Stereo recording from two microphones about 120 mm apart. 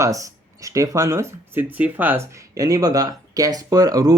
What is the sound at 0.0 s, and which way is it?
Speech, 25° right (ahead or behind).